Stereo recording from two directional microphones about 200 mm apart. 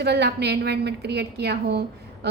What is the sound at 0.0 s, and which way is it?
A woman's voice, 55° right (ahead or behind).